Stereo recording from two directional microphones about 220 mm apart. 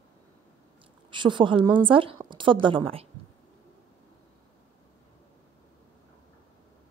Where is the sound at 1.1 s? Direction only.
20° right (ahead or behind).